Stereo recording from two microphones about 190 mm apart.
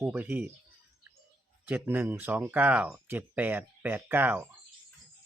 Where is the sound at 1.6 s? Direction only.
10° right (ahead or behind).